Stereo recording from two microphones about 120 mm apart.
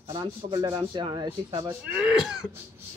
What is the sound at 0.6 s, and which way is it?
Speech, 25° right (ahead or behind).